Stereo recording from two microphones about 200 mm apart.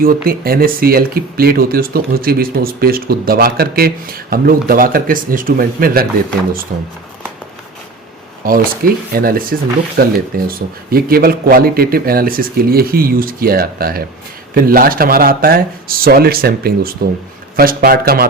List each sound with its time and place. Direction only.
0.0 s speech: 50° right (ahead or behind)
8.4 s speech: 45° right (ahead or behind)